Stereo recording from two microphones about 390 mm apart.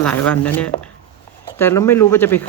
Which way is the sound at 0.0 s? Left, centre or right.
Centre.